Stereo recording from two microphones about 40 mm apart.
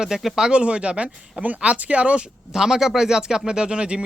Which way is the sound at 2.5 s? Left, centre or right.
Centre.